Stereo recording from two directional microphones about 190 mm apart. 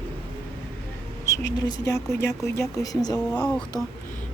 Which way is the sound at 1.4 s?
20° left (ahead or behind).